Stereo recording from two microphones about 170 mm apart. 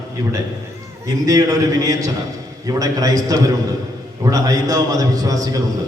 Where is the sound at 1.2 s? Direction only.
20° right (ahead or behind).